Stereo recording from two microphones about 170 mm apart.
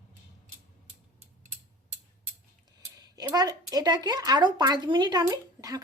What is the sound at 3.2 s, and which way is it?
Speech, 20° right (ahead or behind).